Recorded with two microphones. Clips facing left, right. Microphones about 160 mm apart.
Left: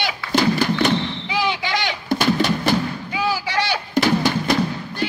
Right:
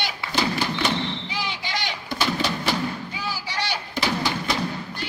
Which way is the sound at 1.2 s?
75° left (ahead or behind).